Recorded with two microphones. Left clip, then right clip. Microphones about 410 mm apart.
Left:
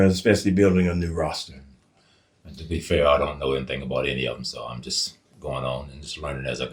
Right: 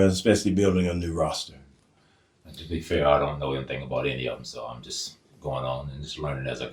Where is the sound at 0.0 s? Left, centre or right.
Left.